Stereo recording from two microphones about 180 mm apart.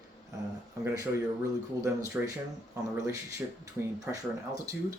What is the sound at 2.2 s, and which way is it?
Speech, 10° right (ahead or behind).